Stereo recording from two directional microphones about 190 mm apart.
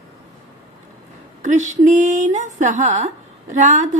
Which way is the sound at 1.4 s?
40° right (ahead or behind).